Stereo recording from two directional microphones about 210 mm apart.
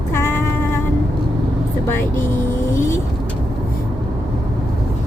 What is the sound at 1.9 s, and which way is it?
Speech, 10° left (ahead or behind).